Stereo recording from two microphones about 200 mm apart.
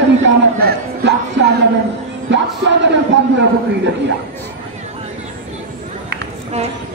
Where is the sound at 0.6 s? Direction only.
60° right (ahead or behind).